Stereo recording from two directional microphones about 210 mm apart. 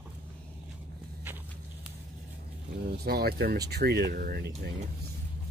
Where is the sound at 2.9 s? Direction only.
45° right (ahead or behind).